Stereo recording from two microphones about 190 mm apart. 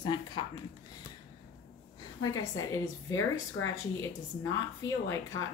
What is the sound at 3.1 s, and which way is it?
Speech, 90° left.